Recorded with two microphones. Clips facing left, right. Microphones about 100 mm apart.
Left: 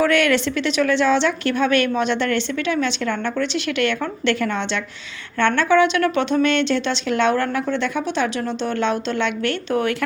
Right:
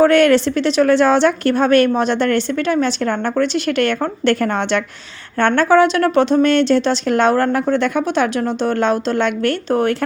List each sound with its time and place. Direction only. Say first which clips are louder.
0.0 s a woman's voice: right 6 dB; 35° right (ahead or behind)